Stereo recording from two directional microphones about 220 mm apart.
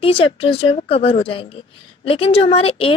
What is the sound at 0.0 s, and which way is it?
A woman's voice, 25° left (ahead or behind).